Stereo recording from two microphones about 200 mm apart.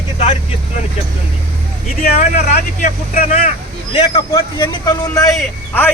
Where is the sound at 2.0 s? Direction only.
45° left (ahead or behind).